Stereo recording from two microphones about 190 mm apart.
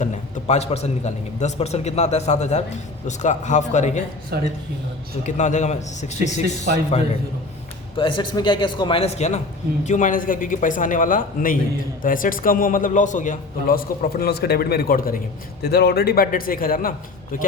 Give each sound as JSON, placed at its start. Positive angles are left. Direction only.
{"t": 0.0, "sound": "a man's voice", "side_deg": 35}
{"t": 4.3, "sound": "speech", "side_deg": -55}
{"t": 5.2, "sound": "a man's voice", "side_deg": 40}
{"t": 7.9, "sound": "a man's voice", "side_deg": 25}